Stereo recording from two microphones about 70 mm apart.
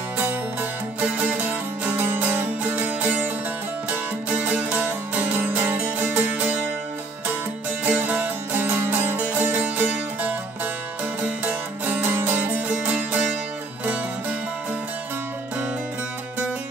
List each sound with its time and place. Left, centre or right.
0.2 s music: right
7.8 s music: right